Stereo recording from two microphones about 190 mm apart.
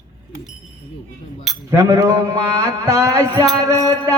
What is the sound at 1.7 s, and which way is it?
A man's voice, 15° right (ahead or behind).